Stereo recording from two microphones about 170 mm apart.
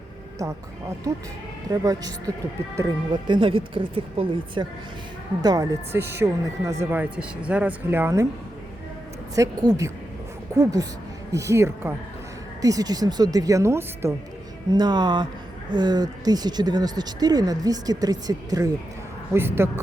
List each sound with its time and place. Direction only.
0.3 s speech: 20° right (ahead or behind)
9.3 s speech: 20° right (ahead or behind)